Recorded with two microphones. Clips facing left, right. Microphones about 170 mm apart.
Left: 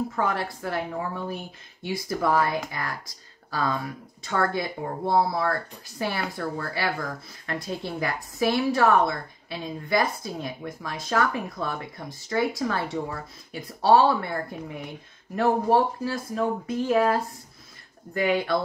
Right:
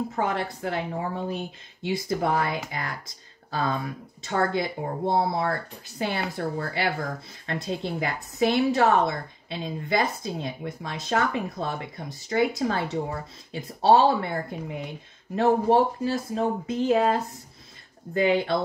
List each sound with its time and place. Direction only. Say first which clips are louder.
0.2 s a woman's voice: right 1 dB; 25° right (ahead or behind)